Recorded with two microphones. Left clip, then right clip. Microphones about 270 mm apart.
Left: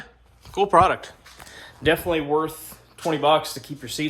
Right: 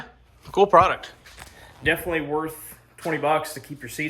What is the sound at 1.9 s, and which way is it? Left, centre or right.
Speech, centre.